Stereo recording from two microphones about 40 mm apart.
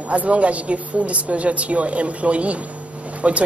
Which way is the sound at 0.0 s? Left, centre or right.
Right.